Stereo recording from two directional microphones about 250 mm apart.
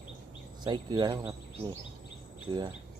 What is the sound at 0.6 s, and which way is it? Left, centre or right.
Speech, centre.